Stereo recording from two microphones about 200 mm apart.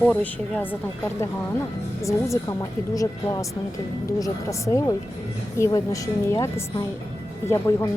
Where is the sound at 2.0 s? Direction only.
15° left (ahead or behind).